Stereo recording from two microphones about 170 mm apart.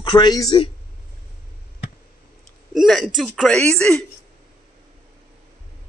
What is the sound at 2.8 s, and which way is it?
Speech, centre (ahead or behind).